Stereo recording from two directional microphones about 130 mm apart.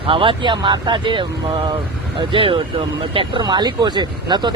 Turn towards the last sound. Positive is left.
turn(degrees=-35)  # may be behind; listen again after turning